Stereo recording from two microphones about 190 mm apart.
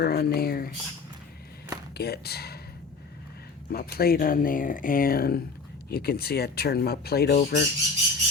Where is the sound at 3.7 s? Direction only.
55° left (ahead or behind).